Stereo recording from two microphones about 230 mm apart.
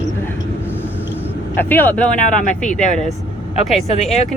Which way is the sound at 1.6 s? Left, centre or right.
Centre.